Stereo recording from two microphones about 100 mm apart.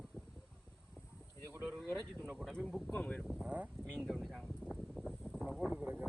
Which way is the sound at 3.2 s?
5° right (ahead or behind).